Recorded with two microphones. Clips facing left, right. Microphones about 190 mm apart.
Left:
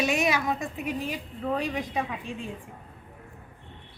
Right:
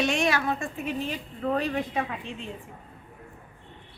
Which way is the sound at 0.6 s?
15° left (ahead or behind).